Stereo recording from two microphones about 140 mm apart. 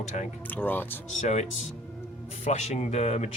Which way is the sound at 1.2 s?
55° left (ahead or behind).